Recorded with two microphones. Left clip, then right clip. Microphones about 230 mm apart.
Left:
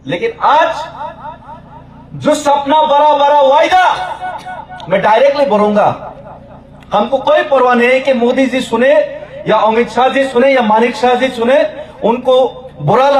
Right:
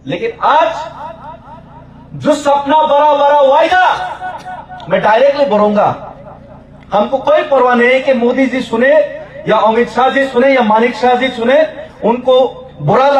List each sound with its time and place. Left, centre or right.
0.1 s a man's voice: left
2.2 s a man's voice: left
6.9 s a man's voice: left